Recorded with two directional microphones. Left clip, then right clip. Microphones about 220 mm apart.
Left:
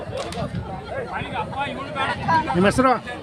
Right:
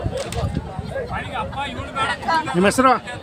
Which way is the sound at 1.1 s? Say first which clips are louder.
Left 1 dB; 50° right (ahead or behind).